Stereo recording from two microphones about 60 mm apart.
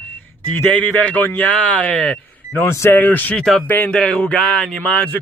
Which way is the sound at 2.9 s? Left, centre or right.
Left.